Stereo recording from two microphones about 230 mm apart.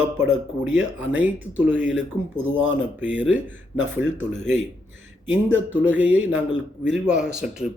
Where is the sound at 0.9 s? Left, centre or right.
Centre.